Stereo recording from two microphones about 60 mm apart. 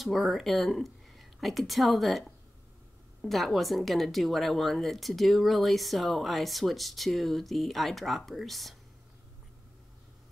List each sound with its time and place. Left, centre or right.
0.0 s speech: centre